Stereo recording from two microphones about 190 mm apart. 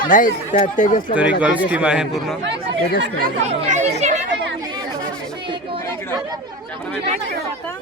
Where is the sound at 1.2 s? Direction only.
5° right (ahead or behind).